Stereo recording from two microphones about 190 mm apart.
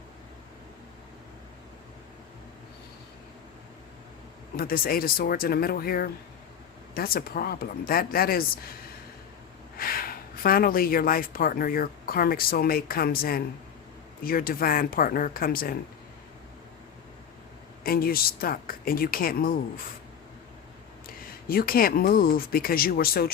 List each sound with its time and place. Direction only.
4.5 s speech: 50° left (ahead or behind)
9.7 s speech: 50° left (ahead or behind)
17.8 s speech: 50° left (ahead or behind)
21.2 s speech: 50° left (ahead or behind)